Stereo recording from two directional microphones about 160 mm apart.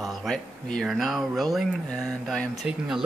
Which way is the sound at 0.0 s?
Centre (ahead or behind).